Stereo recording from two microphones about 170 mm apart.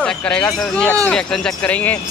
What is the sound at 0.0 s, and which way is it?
A man's voice, 5° left (ahead or behind).